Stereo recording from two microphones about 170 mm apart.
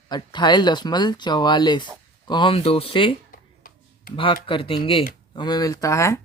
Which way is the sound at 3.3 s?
55° left (ahead or behind).